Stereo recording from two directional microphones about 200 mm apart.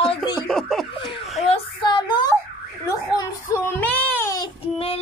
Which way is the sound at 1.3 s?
30° left (ahead or behind).